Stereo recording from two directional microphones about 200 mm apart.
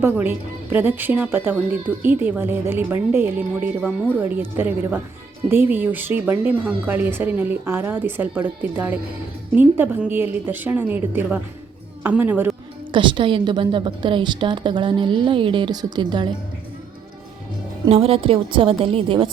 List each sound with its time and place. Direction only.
0.0 s a woman's voice: 10° right (ahead or behind)
12.9 s a woman's voice: 25° right (ahead or behind)
17.8 s a woman's voice: 30° right (ahead or behind)